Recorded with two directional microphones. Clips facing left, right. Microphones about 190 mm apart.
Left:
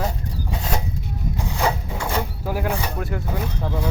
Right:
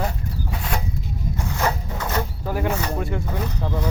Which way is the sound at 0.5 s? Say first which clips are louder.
Left 2 dB; 25° left (ahead or behind).